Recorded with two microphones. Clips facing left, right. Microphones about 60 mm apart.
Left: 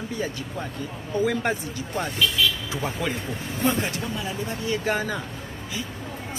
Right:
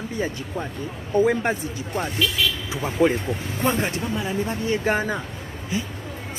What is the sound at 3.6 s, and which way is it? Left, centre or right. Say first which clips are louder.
Speech: right 1 dB; right.